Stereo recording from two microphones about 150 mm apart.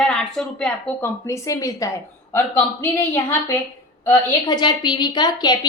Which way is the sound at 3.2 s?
15° left (ahead or behind).